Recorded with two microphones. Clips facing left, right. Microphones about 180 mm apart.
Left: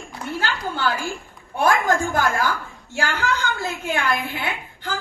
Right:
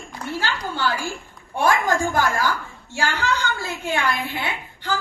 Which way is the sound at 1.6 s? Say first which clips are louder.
Left 1 dB; 50° left (ahead or behind).